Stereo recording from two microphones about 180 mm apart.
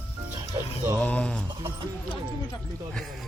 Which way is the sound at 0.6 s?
20° right (ahead or behind).